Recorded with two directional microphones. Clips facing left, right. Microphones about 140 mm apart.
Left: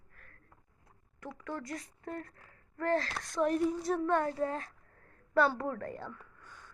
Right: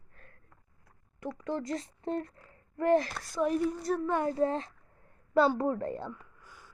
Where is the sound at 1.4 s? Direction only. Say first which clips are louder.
Right 6 dB; 25° right (ahead or behind).